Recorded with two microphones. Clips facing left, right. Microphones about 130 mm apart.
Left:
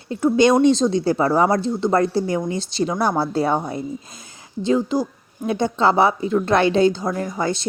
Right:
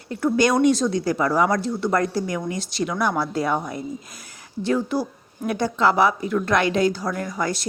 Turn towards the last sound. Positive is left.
turn(degrees=25)  # may be behind; listen again after turning